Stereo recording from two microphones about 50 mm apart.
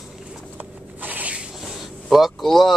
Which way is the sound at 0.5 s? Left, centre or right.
Right.